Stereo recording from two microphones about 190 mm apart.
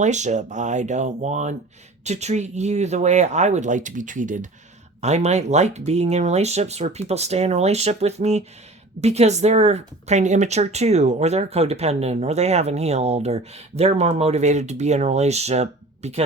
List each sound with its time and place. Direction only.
0.0 s speech: 40° right (ahead or behind)